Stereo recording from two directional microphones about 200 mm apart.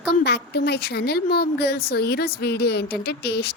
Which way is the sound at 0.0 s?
55° left (ahead or behind).